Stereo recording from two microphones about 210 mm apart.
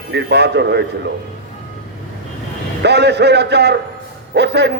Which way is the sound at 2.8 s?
55° right (ahead or behind).